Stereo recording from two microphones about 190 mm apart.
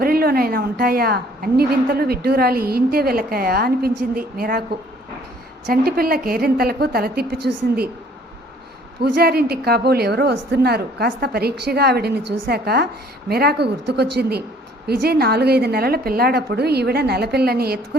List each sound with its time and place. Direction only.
0.0 s a woman's voice: 50° right (ahead or behind)
5.6 s a woman's voice: 50° right (ahead or behind)
9.0 s a woman's voice: 60° right (ahead or behind)